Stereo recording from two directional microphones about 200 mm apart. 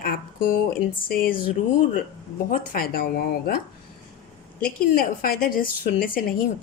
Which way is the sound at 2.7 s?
45° left (ahead or behind).